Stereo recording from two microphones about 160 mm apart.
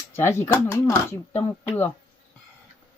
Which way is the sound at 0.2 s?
15° left (ahead or behind).